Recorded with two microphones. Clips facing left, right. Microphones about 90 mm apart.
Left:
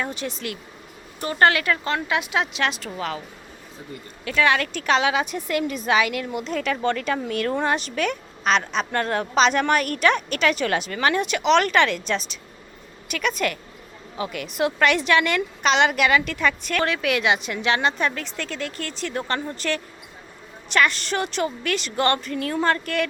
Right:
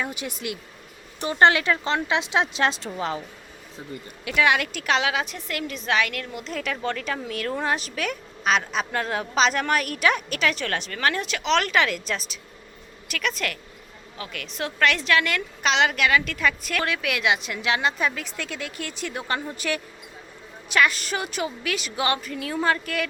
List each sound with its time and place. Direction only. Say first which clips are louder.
0.0 s a woman's voice: left 2 dB; 10° right (ahead or behind); by 2.9 s 30° right (ahead or behind)
4.3 s a woman's voice: left 1 dB; 10° right (ahead or behind)